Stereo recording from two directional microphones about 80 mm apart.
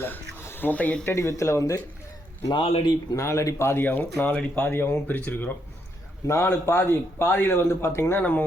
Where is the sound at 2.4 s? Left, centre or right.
Left.